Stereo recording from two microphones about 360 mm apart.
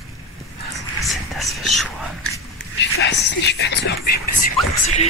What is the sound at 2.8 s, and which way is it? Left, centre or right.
Whispering, left.